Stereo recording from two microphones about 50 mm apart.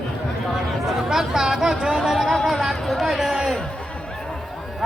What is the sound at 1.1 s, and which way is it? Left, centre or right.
Speech, centre.